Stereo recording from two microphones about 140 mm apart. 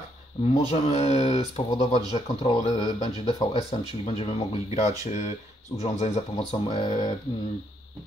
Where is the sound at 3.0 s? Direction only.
30° left (ahead or behind).